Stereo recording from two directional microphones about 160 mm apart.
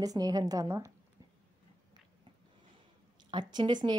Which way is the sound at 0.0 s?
20° right (ahead or behind).